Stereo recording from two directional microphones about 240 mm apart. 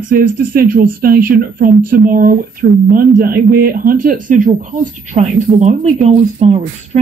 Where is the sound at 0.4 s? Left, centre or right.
Right.